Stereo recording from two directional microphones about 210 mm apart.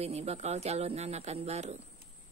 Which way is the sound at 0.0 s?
30° right (ahead or behind).